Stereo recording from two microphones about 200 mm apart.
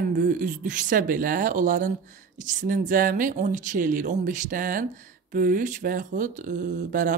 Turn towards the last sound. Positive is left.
turn(degrees=-40)  # may be behind; listen again after turning